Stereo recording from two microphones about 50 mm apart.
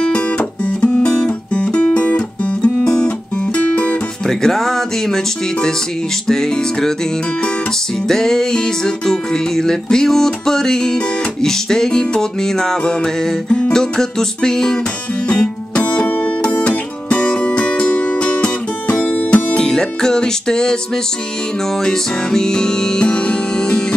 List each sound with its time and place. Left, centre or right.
0.0 s music: left
4.3 s music: centre
8.1 s music: centre
21.8 s music: centre